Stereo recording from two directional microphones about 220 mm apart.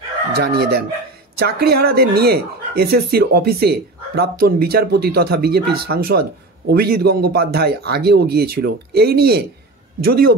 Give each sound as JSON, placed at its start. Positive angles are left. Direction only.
{"t": 0.3, "sound": "speech", "side_deg": -45}